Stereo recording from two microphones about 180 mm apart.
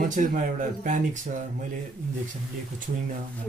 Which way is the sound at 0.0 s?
45° right (ahead or behind).